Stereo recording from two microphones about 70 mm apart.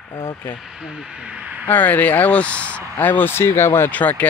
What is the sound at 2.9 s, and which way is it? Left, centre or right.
Speech, left.